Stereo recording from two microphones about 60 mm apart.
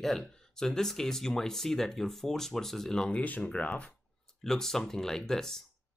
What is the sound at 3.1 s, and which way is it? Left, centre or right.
Speech, left.